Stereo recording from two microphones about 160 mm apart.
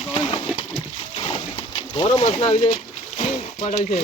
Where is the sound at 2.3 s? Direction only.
45° left (ahead or behind).